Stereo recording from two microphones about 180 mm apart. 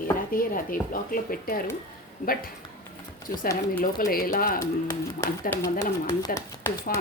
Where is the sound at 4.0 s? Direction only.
55° left (ahead or behind).